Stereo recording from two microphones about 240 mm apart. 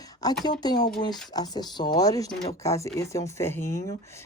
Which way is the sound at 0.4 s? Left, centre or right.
Centre.